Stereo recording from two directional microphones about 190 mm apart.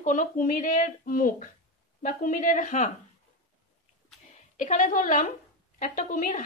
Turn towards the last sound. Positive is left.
turn(degrees=45)  # may be behind; listen again after turning